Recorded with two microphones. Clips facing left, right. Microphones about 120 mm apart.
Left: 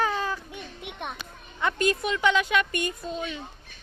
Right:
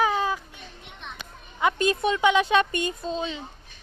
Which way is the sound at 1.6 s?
25° right (ahead or behind).